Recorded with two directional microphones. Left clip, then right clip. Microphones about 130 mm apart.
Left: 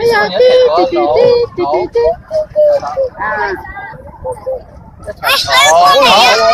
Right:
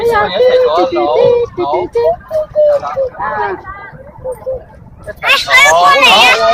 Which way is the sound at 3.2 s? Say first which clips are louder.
Left 1 dB; 40° right (ahead or behind).